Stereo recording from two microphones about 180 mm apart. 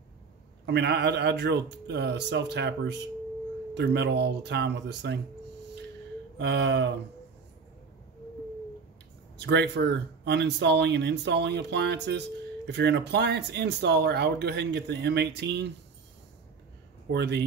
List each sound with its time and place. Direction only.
0.7 s speech: 70° right (ahead or behind)
6.3 s speech: 75° right (ahead or behind)
9.5 s speech: 70° right (ahead or behind)
17.1 s speech: 65° right (ahead or behind)